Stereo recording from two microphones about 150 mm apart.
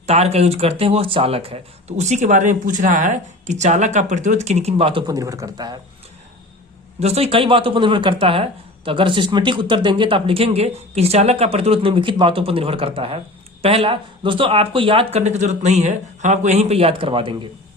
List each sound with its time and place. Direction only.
0.0 s speech: 45° right (ahead or behind)
5.0 s a man's voice: 25° right (ahead or behind)
7.0 s speech: 45° right (ahead or behind)